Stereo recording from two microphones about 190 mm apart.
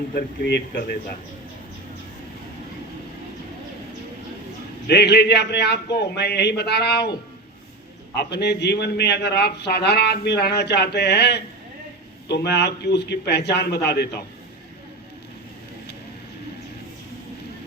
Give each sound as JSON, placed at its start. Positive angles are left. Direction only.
{"t": 0.1, "sound": "a man's voice", "side_deg": 60}
{"t": 4.9, "sound": "a man's voice", "side_deg": 60}
{"t": 8.1, "sound": "a man's voice", "side_deg": 60}